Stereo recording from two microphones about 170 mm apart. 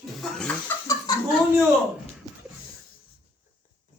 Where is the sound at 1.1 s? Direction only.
25° left (ahead or behind).